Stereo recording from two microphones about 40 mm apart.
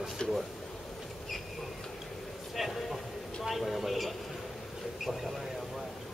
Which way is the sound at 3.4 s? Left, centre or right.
Centre.